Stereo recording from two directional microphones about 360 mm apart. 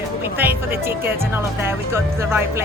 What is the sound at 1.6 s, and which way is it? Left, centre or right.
Speech, centre.